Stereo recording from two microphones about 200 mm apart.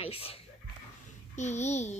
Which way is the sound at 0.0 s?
30° left (ahead or behind).